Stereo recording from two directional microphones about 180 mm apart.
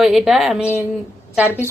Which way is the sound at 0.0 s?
Centre (ahead or behind).